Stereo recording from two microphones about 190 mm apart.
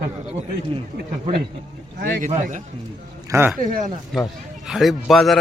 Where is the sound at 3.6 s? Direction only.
40° right (ahead or behind).